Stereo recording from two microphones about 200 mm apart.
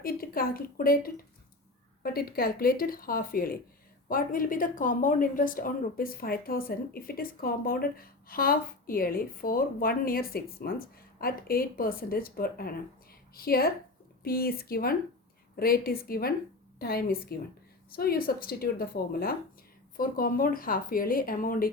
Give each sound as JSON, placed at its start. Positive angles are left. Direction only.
{"t": 0.0, "sound": "a woman's voice", "side_deg": 45}